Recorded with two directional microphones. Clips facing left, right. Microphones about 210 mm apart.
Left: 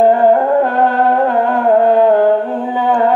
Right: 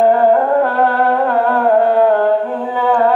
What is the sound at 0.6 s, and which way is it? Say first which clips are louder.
Music: left 1 dB; 20° left (ahead or behind).